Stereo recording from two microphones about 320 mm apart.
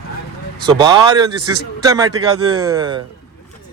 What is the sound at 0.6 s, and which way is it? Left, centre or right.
A man's voice, centre.